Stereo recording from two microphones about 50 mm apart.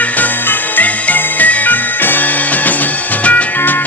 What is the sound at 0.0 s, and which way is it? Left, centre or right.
Music, left.